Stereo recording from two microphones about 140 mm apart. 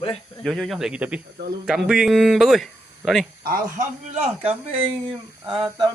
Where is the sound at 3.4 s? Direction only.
90° right.